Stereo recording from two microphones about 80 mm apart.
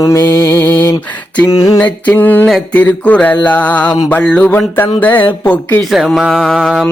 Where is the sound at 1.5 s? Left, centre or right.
Left.